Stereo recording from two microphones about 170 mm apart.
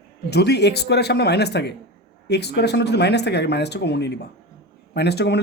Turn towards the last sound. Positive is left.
turn(degrees=75)  # may be behind; listen again after turning